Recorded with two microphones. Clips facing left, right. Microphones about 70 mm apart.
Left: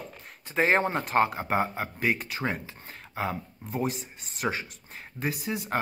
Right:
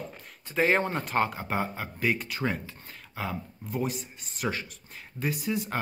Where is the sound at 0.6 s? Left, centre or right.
Centre.